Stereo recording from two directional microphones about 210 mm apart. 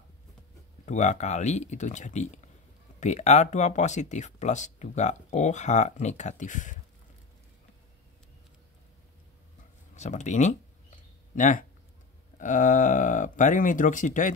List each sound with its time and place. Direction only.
0.8 s speech: 35° left (ahead or behind)
9.9 s speech: 35° left (ahead or behind)